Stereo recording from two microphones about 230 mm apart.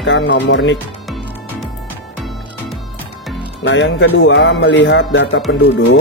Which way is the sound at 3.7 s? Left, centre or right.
Left.